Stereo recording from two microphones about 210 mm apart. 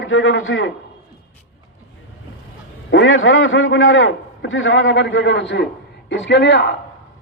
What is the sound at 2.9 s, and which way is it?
A man's voice, 65° left (ahead or behind).